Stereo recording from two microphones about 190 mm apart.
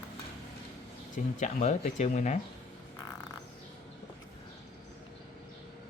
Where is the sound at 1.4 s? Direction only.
40° left (ahead or behind).